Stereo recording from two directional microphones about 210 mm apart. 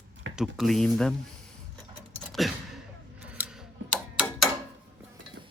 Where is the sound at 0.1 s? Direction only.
65° right (ahead or behind).